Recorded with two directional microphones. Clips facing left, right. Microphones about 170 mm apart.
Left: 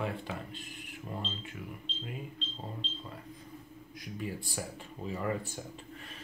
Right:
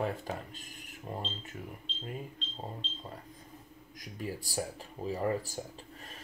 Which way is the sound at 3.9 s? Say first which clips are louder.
Even; 40° right (ahead or behind).